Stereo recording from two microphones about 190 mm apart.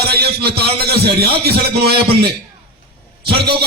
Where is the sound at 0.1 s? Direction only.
55° right (ahead or behind).